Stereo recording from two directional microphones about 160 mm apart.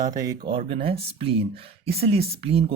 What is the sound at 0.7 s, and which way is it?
Speech, 35° right (ahead or behind).